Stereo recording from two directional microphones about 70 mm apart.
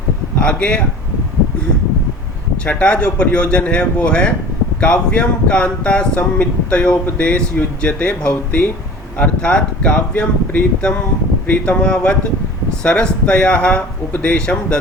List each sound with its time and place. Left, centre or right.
0.3 s speech: centre
2.6 s speech: centre